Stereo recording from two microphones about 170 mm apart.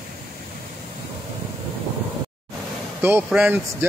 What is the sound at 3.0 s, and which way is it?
Speech, 10° right (ahead or behind).